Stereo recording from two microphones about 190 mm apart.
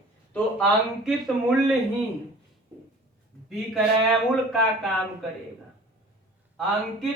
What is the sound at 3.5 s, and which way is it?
A man's voice, centre (ahead or behind).